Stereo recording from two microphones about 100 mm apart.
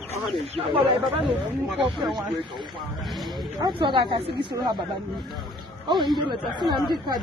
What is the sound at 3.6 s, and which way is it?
Speech, 55° right (ahead or behind).